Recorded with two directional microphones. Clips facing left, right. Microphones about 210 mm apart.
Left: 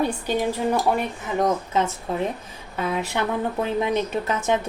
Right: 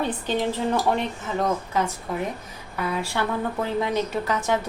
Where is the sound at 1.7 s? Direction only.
25° left (ahead or behind).